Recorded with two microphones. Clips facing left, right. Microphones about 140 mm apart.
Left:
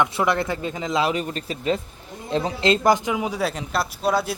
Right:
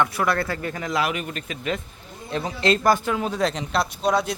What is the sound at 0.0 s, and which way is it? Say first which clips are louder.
Speech: left 1 dB; 20° left (ahead or behind).